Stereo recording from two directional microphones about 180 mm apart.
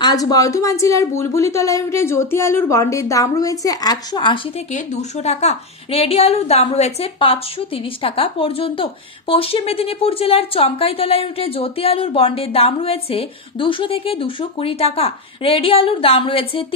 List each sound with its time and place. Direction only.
0.0 s speech: 20° left (ahead or behind)